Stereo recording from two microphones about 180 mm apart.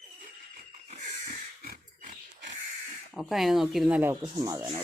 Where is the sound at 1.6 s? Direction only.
55° right (ahead or behind).